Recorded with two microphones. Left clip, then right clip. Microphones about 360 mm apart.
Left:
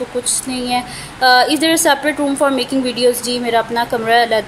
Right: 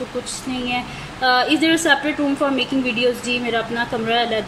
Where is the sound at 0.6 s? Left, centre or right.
Centre.